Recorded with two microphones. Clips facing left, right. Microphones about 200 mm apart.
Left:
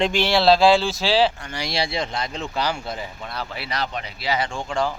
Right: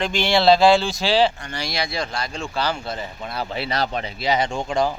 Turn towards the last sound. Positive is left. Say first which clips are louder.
# right 3 dB
turn(degrees=-20)  # may be behind; listen again after turning